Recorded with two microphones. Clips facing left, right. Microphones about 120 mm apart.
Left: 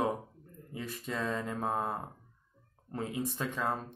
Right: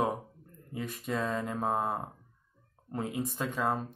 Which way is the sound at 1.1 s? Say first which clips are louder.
Right 2 dB; 15° right (ahead or behind).